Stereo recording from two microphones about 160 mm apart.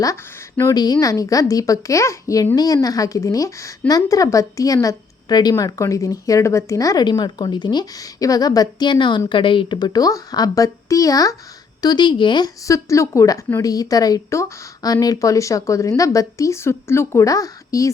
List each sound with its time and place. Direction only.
0.0 s a woman's voice: 20° left (ahead or behind)